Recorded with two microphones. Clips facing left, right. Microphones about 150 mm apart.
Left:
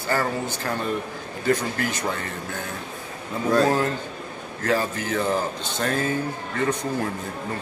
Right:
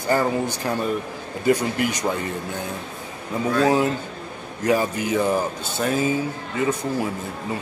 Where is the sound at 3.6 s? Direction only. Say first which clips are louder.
Right 3 dB; 15° right (ahead or behind).